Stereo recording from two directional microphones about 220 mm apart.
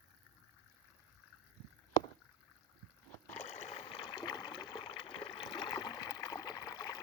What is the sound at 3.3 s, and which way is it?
Water, 30° left (ahead or behind).